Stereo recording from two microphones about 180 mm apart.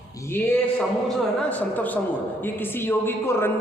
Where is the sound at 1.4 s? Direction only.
10° left (ahead or behind).